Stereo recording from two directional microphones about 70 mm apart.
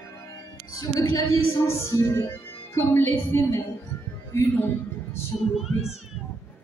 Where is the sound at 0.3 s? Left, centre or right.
Left.